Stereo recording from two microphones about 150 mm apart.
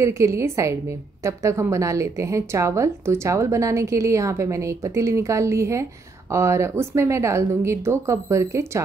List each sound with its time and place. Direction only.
0.0 s a woman's voice: 20° right (ahead or behind)